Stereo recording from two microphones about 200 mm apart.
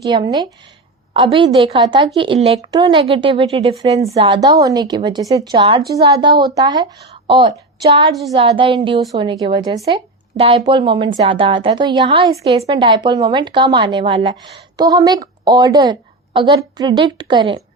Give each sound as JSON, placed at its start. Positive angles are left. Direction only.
{"t": 0.0, "sound": "a woman's voice", "side_deg": -20}